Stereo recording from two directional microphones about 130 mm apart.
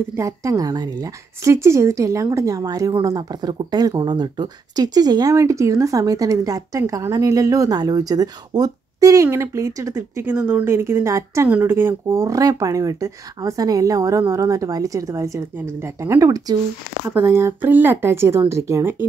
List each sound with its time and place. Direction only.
0.1 s speech: 25° right (ahead or behind)
17.0 s speech: 15° right (ahead or behind)